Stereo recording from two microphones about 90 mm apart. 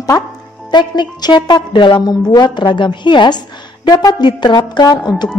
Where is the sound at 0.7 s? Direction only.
55° left (ahead or behind).